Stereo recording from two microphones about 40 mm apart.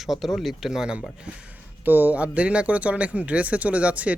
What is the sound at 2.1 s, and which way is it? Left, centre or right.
Speech, right.